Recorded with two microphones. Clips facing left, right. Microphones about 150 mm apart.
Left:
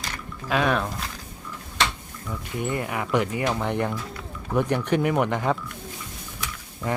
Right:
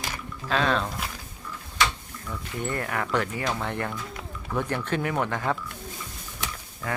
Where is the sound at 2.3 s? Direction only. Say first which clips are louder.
Left 3 dB; 10° left (ahead or behind).